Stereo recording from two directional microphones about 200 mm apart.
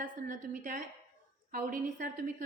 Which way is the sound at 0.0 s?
40° right (ahead or behind).